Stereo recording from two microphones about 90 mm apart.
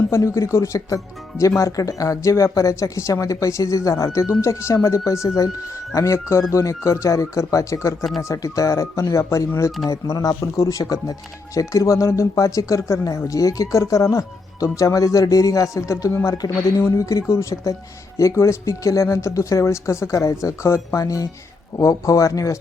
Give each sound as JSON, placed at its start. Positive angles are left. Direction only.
{"t": 0.1, "sound": "speech", "side_deg": 35}